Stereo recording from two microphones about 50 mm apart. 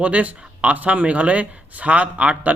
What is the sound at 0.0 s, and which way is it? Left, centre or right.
Speech, right.